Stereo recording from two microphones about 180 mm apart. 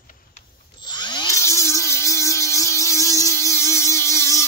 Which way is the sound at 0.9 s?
25° left (ahead or behind).